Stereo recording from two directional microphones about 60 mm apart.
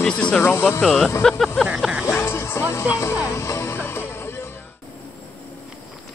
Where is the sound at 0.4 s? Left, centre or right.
Left.